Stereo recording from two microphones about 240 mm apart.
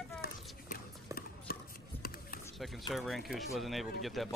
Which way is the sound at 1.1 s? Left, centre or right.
Left.